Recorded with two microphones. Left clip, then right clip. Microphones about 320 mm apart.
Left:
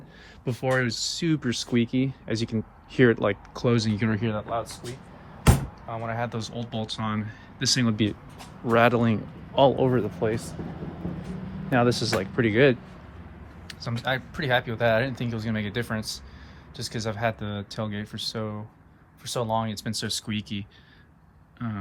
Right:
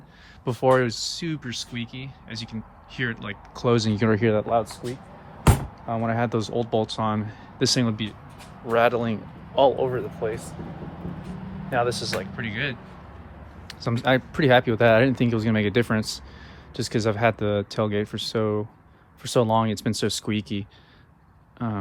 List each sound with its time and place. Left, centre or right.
0.4 s speech: centre; by 4.6 s right
5.9 s speech: right; by 7.9 s centre
8.7 s speech: left
11.7 s speech: left
13.7 s speech: centre